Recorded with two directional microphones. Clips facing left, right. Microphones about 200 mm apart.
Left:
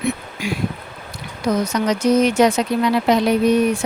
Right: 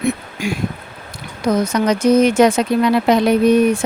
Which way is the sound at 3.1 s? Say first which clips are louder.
Right 3 dB; 55° right (ahead or behind).